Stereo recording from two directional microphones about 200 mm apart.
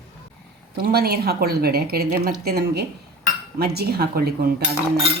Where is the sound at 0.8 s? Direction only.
50° right (ahead or behind).